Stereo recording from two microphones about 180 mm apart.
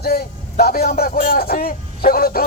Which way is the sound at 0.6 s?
60° left (ahead or behind).